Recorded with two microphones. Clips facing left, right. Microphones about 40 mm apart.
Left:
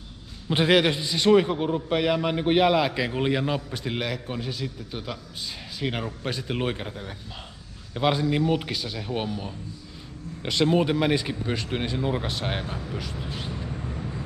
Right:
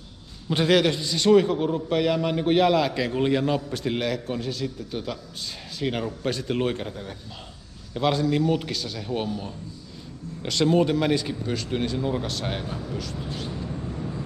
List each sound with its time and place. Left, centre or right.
0.5 s a man's voice: centre